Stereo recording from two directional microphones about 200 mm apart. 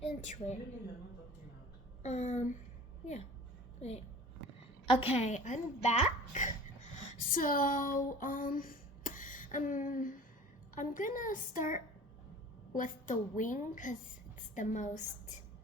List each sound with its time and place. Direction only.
0.0 s a woman's voice: 35° left (ahead or behind)
2.0 s a woman's voice: 35° left (ahead or behind)
3.8 s a child's voice: 30° left (ahead or behind)